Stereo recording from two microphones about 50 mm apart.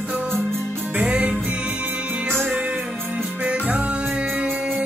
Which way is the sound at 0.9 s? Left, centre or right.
Right.